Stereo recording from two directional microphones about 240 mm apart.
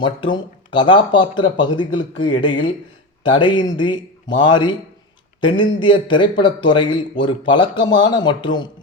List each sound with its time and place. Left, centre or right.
0.0 s speech: centre